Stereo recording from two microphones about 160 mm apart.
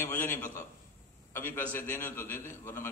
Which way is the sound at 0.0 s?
15° left (ahead or behind).